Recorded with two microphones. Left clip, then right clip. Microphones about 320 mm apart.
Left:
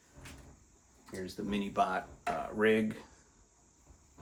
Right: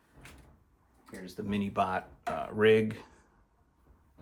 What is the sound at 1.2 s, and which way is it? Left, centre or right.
Speech, right.